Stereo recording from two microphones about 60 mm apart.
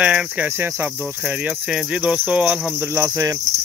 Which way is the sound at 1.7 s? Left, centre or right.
Centre.